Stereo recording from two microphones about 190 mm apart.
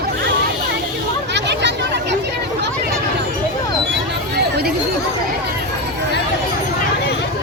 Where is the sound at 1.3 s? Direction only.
65° right (ahead or behind).